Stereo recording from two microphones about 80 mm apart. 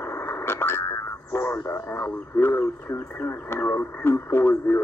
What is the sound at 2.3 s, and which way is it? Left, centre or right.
Speech, left.